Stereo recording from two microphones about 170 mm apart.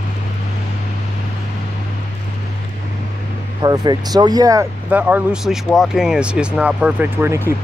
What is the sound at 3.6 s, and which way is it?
Speech, 25° right (ahead or behind).